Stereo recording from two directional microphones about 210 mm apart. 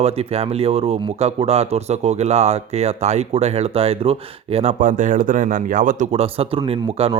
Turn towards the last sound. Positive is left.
turn(degrees=-25)  # may be behind; listen again after turning